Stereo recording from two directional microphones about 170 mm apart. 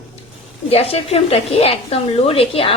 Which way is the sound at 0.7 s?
35° left (ahead or behind).